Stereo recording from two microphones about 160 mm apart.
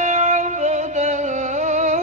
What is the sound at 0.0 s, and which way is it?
Music, 50° right (ahead or behind).